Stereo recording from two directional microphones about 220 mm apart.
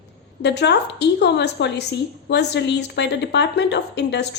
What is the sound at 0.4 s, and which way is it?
A woman's voice, 50° left (ahead or behind).